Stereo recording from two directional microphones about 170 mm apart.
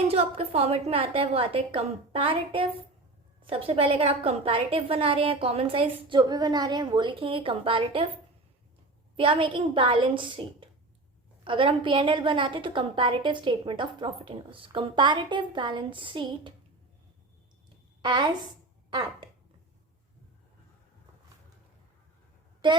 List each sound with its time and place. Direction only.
0.1 s a woman's voice: 35° right (ahead or behind)
9.1 s a woman's voice: 30° right (ahead or behind)
18.0 s a woman's voice: 25° right (ahead or behind)
22.6 s a woman's voice: 30° right (ahead or behind)